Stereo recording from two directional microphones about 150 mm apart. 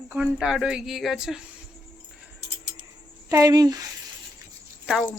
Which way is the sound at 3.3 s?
20° right (ahead or behind).